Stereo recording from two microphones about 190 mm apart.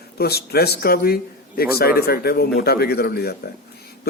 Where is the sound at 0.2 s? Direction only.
55° left (ahead or behind).